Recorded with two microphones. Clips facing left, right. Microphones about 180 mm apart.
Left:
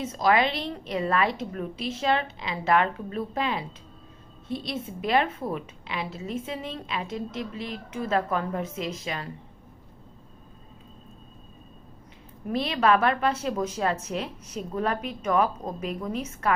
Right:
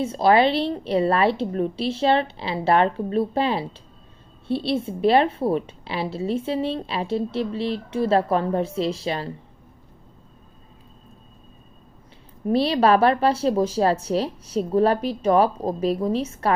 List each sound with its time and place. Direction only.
0.0 s a woman's voice: 30° right (ahead or behind)
12.5 s a woman's voice: 30° right (ahead or behind)